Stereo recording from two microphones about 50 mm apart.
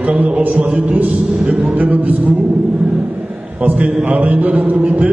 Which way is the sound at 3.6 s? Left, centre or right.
Right.